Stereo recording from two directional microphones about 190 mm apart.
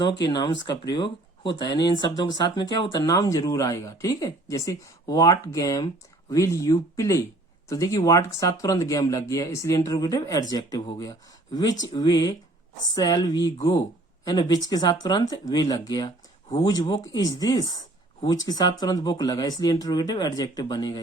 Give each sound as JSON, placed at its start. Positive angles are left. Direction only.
{"t": 0.0, "sound": "speech", "side_deg": 25}